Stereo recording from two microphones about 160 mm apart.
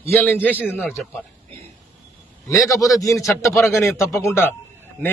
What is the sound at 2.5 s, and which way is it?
A man's voice, 20° left (ahead or behind).